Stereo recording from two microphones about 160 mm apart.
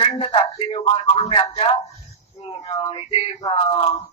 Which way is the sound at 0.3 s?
30° left (ahead or behind).